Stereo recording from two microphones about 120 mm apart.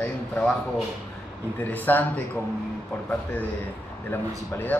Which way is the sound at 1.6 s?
15° left (ahead or behind).